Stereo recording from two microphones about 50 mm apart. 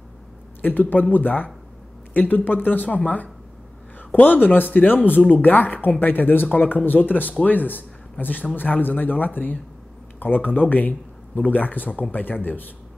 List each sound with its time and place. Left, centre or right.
0.6 s speech: left